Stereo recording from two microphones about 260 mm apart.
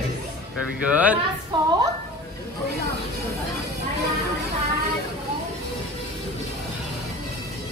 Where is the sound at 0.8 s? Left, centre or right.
Centre.